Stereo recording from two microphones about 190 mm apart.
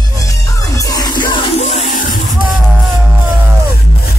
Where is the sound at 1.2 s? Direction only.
40° left (ahead or behind).